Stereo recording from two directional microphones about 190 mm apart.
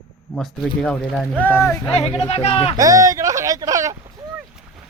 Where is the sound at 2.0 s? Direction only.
35° left (ahead or behind).